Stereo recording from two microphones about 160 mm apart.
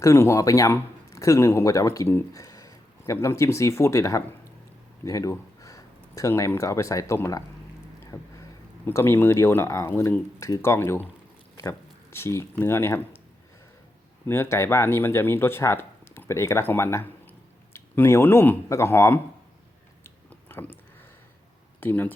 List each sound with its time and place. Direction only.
0.0 s speech: 15° left (ahead or behind)
12.1 s speech: 15° left (ahead or behind)
14.3 s speech: 15° left (ahead or behind)
20.1 s a sound: 15° left (ahead or behind)
21.8 s speech: 10° left (ahead or behind)